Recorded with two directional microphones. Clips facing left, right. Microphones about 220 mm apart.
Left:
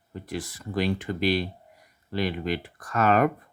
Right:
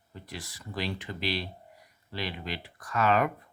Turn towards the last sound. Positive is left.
turn(degrees=50)  # may be behind; listen again after turning